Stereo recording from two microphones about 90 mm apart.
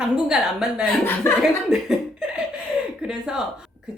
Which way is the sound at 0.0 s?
10° right (ahead or behind).